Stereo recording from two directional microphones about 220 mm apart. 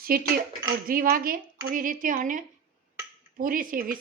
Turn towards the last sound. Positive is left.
turn(degrees=-40)  # may be behind; listen again after turning